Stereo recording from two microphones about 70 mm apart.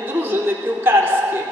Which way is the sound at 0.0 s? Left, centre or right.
Right.